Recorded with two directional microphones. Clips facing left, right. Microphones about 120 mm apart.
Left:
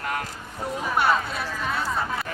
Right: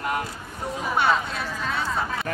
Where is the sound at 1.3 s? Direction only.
10° left (ahead or behind).